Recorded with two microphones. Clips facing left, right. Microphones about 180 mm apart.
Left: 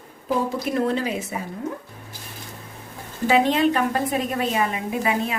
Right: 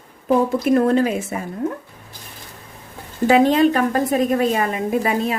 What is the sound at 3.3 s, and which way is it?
A woman's voice, 45° right (ahead or behind).